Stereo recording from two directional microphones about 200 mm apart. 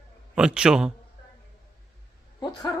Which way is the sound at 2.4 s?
20° left (ahead or behind).